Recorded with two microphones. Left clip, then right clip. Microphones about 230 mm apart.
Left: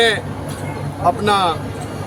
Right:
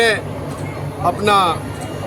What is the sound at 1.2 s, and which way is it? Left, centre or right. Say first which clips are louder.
Speech: right 5 dB; centre.